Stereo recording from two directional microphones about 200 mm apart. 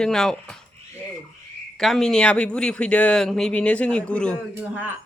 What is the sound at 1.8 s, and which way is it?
Speech, centre (ahead or behind).